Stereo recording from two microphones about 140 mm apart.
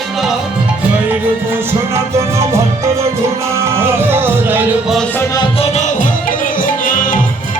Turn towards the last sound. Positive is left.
turn(degrees=70)  # may be behind; listen again after turning